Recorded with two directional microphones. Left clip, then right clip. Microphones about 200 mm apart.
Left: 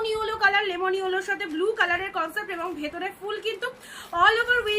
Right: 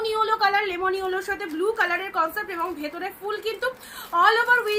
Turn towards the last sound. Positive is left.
turn(degrees=10)  # may be behind; listen again after turning